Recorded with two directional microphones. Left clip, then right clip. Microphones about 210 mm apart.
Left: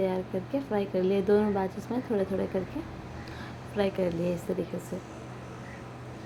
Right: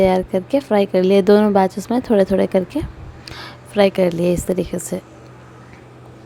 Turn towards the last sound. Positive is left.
turn(degrees=-45)  # may be behind; listen again after turning